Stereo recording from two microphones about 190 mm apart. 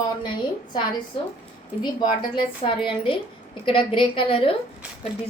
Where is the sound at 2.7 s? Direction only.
25° left (ahead or behind).